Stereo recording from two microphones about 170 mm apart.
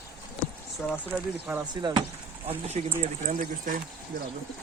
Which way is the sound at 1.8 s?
25° right (ahead or behind).